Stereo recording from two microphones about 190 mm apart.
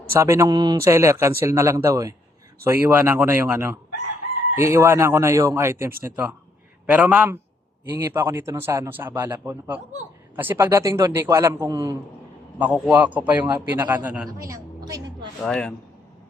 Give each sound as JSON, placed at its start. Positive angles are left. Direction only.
{"t": 0.1, "sound": "a woman's voice", "side_deg": -15}
{"t": 15.4, "sound": "speech", "side_deg": 5}